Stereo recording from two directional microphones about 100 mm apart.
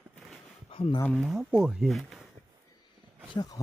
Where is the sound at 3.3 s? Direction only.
50° left (ahead or behind).